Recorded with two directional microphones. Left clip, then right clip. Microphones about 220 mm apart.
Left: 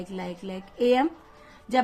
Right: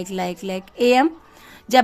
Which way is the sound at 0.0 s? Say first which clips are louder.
Right 9 dB; 45° right (ahead or behind).